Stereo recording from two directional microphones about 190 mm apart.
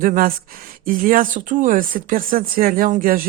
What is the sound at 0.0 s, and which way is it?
Speech, 45° right (ahead or behind).